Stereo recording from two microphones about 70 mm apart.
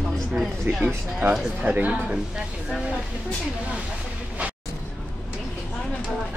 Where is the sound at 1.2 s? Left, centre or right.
Centre.